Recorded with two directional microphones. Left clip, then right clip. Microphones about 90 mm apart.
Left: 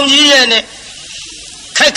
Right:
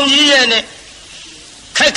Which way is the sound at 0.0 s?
35° right (ahead or behind).